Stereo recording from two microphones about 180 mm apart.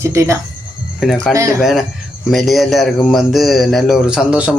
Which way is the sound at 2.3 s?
Centre (ahead or behind).